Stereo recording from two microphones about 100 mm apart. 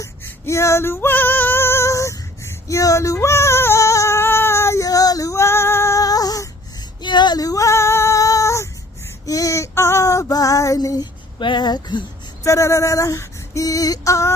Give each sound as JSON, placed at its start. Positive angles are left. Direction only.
{"t": 0.3, "sound": "female singing", "side_deg": 30}
{"t": 7.0, "sound": "female singing", "side_deg": 50}
{"t": 11.3, "sound": "a sound", "side_deg": 50}
{"t": 12.5, "sound": "female singing", "side_deg": 30}